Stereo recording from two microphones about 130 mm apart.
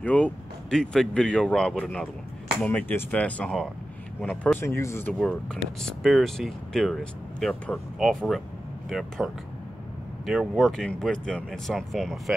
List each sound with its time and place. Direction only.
0.0 s speech: 10° left (ahead or behind)
4.6 s speech: 20° left (ahead or behind)
5.2 s speech: 5° left (ahead or behind)